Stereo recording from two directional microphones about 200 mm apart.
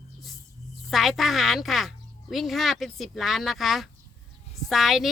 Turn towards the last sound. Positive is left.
turn(degrees=0)  # may be behind; listen again after turning